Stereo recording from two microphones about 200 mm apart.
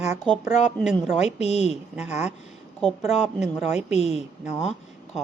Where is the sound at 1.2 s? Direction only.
30° left (ahead or behind).